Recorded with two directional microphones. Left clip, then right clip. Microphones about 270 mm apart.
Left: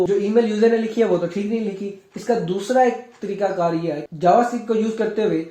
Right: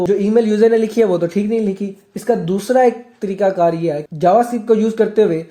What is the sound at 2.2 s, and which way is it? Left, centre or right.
Speech, right.